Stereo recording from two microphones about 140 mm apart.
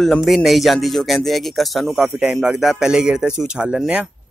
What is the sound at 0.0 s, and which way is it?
Speech, centre (ahead or behind).